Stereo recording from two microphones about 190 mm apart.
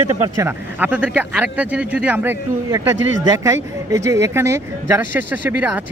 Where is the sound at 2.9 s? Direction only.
80° right.